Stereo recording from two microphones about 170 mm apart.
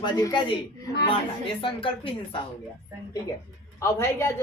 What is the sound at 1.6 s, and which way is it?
Speech, 30° left (ahead or behind).